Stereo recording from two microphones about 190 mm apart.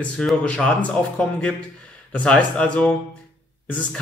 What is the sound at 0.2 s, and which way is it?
Speech, 5° left (ahead or behind).